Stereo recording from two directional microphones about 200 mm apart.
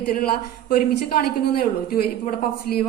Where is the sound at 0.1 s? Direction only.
45° left (ahead or behind).